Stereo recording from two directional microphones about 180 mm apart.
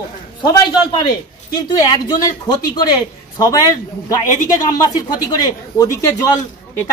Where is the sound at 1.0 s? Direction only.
20° left (ahead or behind).